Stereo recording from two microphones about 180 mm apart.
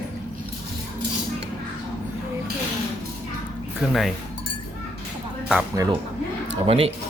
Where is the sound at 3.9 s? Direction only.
Centre (ahead or behind).